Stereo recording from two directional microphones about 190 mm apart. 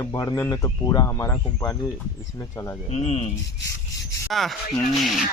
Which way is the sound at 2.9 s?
35° left (ahead or behind).